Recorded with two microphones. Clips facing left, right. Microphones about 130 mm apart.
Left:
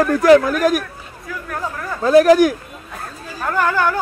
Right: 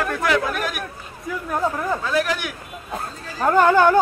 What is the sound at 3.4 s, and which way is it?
Speech, 25° right (ahead or behind).